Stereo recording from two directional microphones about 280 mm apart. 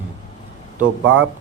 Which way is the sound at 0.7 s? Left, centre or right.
Right.